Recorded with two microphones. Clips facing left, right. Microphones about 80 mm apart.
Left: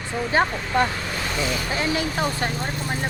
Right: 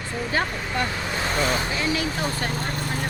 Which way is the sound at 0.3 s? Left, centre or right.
Left.